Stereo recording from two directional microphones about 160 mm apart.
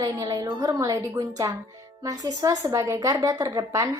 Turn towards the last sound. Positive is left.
turn(degrees=-20)  # may be behind; listen again after turning